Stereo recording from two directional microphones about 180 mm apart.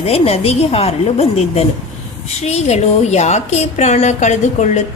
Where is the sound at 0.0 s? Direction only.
35° left (ahead or behind).